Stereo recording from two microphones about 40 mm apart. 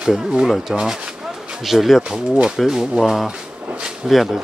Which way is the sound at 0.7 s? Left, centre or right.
Centre.